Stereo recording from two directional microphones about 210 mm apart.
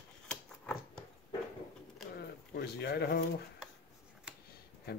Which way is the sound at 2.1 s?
50° left (ahead or behind).